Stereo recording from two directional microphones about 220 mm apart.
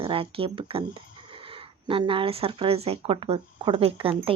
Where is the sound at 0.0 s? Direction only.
25° right (ahead or behind).